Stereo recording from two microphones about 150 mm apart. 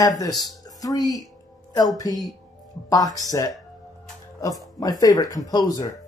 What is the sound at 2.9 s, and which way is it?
Speech, 25° left (ahead or behind).